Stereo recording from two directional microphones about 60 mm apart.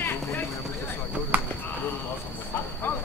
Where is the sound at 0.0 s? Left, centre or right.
Left.